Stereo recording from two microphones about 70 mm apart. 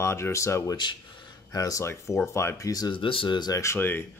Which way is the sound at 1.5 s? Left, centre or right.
Left.